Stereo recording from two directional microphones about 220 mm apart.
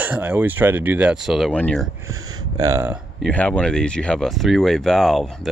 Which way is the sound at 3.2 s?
5° left (ahead or behind).